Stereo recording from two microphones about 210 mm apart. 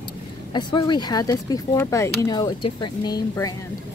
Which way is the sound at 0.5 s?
20° left (ahead or behind).